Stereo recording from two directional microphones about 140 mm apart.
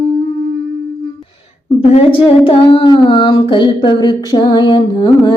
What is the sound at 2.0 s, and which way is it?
Child singing, 40° left (ahead or behind).